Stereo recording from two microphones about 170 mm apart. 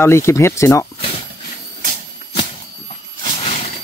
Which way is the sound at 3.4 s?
35° left (ahead or behind).